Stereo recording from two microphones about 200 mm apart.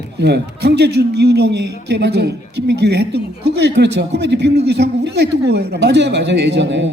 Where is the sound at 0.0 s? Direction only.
55° right (ahead or behind).